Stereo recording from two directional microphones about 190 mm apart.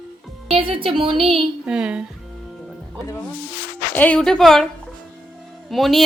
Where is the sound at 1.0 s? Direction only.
Centre (ahead or behind).